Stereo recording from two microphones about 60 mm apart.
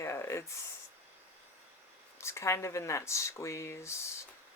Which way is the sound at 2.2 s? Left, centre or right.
Left.